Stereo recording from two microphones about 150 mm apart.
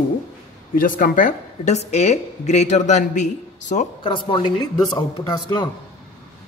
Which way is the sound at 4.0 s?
35° left (ahead or behind).